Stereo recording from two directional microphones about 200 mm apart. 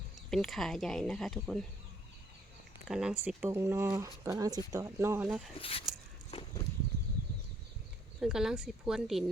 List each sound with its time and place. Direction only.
0.3 s speech: centre (ahead or behind)
2.8 s speech: 5° right (ahead or behind)
5.5 s speech: 30° left (ahead or behind)
6.3 s walk: 30° left (ahead or behind)
8.2 s speech: 5° right (ahead or behind)